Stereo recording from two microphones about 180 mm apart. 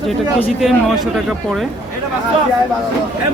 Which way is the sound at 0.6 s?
Centre (ahead or behind).